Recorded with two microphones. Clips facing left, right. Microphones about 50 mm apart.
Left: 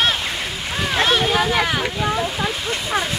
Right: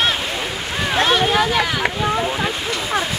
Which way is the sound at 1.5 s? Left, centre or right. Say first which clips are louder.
Even; centre.